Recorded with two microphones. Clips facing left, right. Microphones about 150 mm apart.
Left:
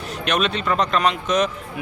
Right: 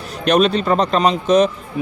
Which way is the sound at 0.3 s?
35° right (ahead or behind).